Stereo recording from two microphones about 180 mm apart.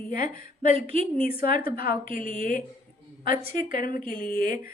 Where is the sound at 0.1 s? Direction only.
55° left (ahead or behind).